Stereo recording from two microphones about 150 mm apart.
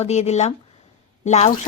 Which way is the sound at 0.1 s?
50° left (ahead or behind).